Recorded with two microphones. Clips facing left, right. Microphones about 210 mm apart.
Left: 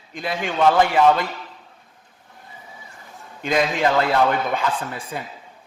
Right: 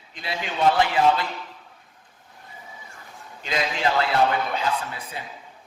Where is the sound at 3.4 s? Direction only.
50° left (ahead or behind).